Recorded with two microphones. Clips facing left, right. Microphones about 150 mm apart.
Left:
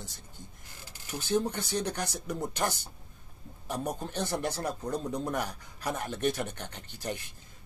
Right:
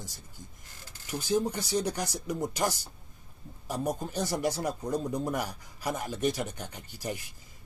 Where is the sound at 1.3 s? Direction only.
10° right (ahead or behind).